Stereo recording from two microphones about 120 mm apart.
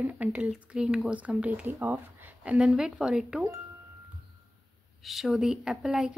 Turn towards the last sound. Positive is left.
turn(degrees=-5)  # may be behind; listen again after turning